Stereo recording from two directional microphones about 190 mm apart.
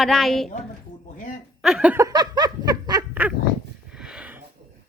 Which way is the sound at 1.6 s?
5° right (ahead or behind).